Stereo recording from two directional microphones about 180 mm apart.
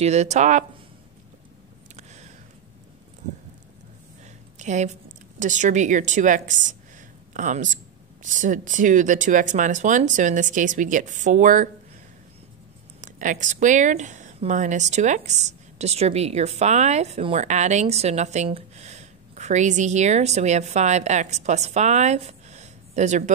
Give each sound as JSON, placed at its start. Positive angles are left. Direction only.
{"t": 0.0, "sound": "speech", "side_deg": -40}
{"t": 4.6, "sound": "speech", "side_deg": -40}
{"t": 13.0, "sound": "speech", "side_deg": -45}